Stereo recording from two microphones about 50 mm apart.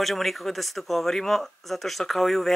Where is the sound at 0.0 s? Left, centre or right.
Centre.